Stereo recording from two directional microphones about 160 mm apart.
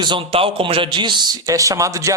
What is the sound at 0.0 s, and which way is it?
Speech, 30° right (ahead or behind).